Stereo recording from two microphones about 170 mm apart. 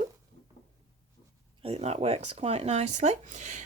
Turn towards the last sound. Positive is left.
turn(degrees=-45)  # may be behind; listen again after turning